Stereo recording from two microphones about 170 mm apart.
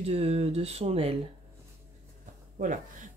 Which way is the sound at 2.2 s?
50° right (ahead or behind).